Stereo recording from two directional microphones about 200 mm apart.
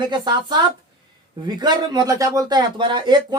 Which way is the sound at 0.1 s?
20° right (ahead or behind).